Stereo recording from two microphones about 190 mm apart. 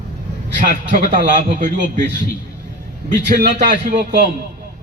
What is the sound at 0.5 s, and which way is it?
A man's voice, 45° right (ahead or behind).